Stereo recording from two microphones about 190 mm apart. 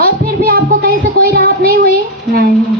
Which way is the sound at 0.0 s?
50° right (ahead or behind).